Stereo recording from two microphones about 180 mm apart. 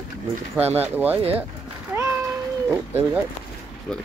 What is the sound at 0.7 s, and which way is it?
Speech, 10° right (ahead or behind).